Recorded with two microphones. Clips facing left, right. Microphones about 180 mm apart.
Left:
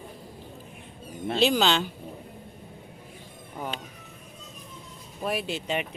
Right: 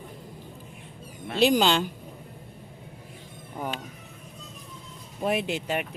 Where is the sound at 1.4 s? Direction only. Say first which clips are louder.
Right 2 dB; 10° right (ahead or behind).